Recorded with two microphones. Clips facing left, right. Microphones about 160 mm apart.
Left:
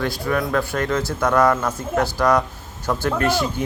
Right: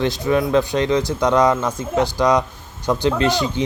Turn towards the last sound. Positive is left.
turn(degrees=5)  # may be behind; listen again after turning